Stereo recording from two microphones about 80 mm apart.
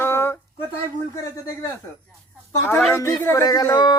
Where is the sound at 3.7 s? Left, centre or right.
Left.